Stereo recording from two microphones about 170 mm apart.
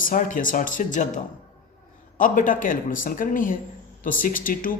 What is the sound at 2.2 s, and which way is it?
A man's voice, 50° left (ahead or behind).